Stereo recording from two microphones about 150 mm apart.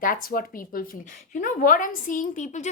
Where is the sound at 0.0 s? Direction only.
70° left (ahead or behind).